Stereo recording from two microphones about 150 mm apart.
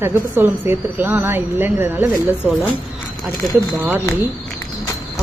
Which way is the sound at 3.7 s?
10° right (ahead or behind).